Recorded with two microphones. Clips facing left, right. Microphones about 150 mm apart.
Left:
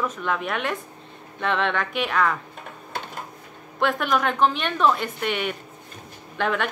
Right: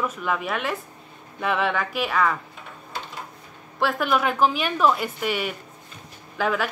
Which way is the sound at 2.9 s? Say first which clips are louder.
Left 2 dB; 55° left (ahead or behind).